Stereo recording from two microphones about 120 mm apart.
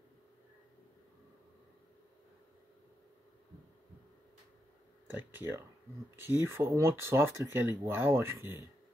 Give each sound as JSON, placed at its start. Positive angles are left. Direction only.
{"t": 5.0, "sound": "speech", "side_deg": -15}